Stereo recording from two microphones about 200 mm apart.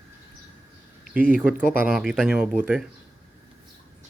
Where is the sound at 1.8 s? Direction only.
5° right (ahead or behind).